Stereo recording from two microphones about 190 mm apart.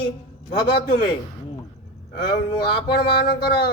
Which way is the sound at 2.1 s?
55° left (ahead or behind).